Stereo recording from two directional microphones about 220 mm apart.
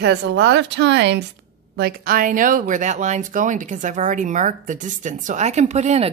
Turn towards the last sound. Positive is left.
turn(degrees=-30)  # may be behind; listen again after turning